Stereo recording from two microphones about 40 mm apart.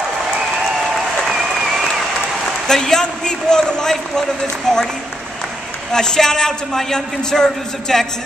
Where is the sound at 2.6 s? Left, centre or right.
Centre.